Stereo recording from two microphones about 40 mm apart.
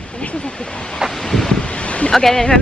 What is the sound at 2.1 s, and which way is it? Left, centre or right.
Speech, centre.